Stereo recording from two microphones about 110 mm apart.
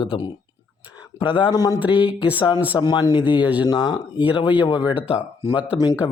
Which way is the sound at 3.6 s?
45° left (ahead or behind).